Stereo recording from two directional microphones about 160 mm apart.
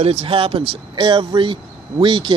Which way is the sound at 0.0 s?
40° right (ahead or behind).